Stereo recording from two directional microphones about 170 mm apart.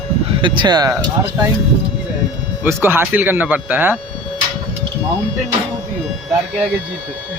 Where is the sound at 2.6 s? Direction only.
15° right (ahead or behind).